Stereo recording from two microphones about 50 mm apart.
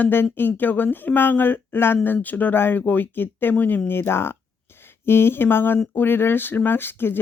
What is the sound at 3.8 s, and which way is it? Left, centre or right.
Speech, left.